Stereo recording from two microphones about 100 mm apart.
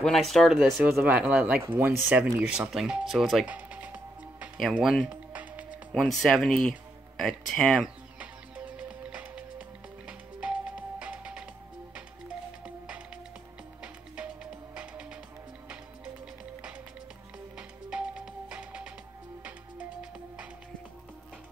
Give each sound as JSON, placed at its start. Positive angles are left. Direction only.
{"t": 0.0, "sound": "speech", "side_deg": 0}
{"t": 1.0, "sound": "speech", "side_deg": -15}
{"t": 1.6, "sound": "speech", "side_deg": -25}
{"t": 2.4, "sound": "speech", "side_deg": -10}
{"t": 3.4, "sound": "music", "side_deg": -15}
{"t": 4.6, "sound": "speech", "side_deg": -5}
{"t": 5.3, "sound": "music", "side_deg": -15}
{"t": 5.9, "sound": "speech", "side_deg": 0}
{"t": 8.2, "sound": "music", "side_deg": -15}
{"t": 14.1, "sound": "music", "side_deg": -10}
{"t": 17.6, "sound": "music", "side_deg": -10}